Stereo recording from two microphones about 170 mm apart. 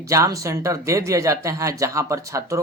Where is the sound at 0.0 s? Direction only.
20° right (ahead or behind).